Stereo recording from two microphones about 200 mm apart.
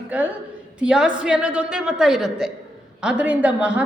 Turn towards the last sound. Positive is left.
turn(degrees=-5)  # may be behind; listen again after turning